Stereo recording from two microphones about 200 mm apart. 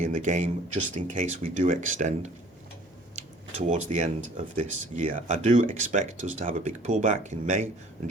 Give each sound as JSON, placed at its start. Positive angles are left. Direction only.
{"t": 0.0, "sound": "speech", "side_deg": -35}
{"t": 3.6, "sound": "speech", "side_deg": -35}